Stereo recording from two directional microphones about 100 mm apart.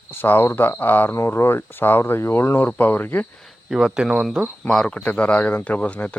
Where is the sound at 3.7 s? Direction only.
5° right (ahead or behind); by 6.1 s 15° left (ahead or behind).